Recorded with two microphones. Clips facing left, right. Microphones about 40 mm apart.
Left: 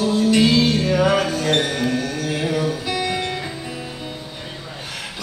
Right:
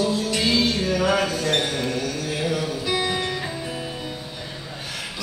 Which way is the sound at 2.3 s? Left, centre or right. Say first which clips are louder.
Left 4 dB; left.